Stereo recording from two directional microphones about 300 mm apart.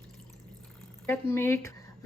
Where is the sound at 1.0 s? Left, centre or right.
Centre.